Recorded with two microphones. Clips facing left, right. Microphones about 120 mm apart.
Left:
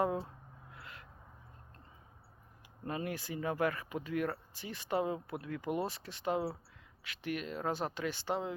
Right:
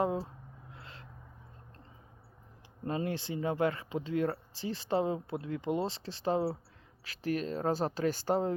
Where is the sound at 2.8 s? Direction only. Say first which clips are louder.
Right 4 dB; 30° right (ahead or behind).